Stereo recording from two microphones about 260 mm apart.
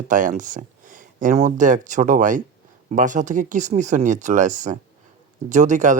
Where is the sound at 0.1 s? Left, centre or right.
Right.